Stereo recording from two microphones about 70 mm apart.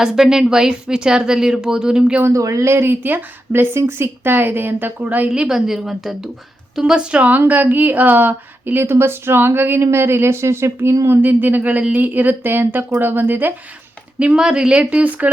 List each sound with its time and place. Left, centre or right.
0.0 s speech: centre
2.2 s a woman's voice: right
5.3 s a woman's voice: centre; by 10.9 s right
11.1 s a woman's voice: right
14.2 s speech: centre